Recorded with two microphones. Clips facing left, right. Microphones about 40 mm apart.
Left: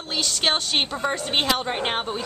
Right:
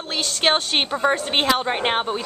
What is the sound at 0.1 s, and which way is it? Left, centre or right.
Speech, centre.